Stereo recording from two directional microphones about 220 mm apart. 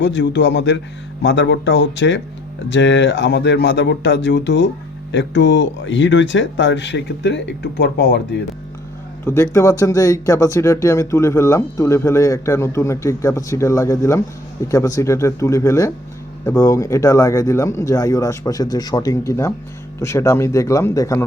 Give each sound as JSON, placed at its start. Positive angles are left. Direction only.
{"t": 0.0, "sound": "speech", "side_deg": 55}
{"t": 9.2, "sound": "speech", "side_deg": 10}